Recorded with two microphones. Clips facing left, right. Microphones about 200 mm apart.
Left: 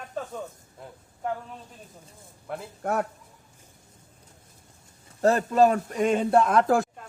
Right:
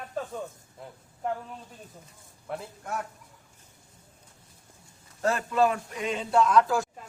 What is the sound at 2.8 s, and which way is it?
Speech, 55° left (ahead or behind).